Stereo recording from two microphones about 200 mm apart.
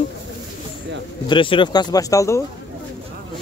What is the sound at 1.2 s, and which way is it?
Speech, 25° left (ahead or behind).